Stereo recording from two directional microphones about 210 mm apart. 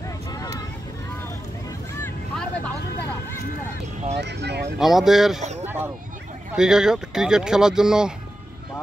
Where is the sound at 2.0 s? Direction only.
5° left (ahead or behind).